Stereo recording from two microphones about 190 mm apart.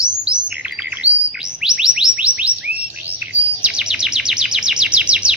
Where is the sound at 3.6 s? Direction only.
5° right (ahead or behind).